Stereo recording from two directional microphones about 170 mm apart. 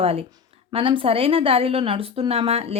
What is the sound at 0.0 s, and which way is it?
Speech, 35° right (ahead or behind).